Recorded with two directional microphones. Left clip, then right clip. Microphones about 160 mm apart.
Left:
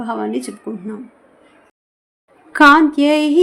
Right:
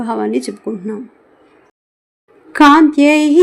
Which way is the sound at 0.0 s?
25° right (ahead or behind).